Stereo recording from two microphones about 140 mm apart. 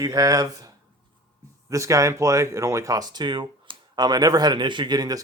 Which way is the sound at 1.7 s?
20° right (ahead or behind).